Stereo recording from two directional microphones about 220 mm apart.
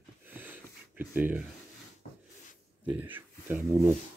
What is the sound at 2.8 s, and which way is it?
Speech, 10° right (ahead or behind).